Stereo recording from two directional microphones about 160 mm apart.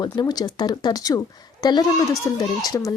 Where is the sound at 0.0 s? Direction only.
25° left (ahead or behind).